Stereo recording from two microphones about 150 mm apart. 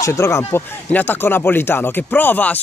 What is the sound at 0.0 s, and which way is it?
Speech, 20° left (ahead or behind).